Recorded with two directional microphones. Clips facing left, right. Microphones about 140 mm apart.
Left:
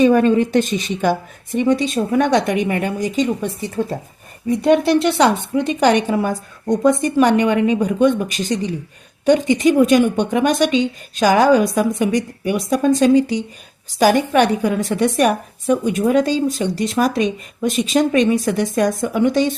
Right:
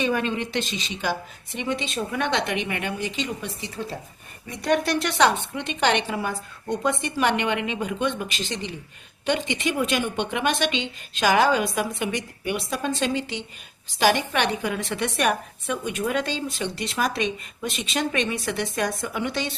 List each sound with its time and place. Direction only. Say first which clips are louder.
0.0 s a woman's voice: left 12 dB; 40° left (ahead or behind)
4.4 s a woman's voice: left 9 dB; 30° left (ahead or behind); by 19.5 s 45° left (ahead or behind)